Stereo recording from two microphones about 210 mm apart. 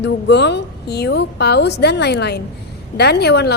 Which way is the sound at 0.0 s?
55° left (ahead or behind).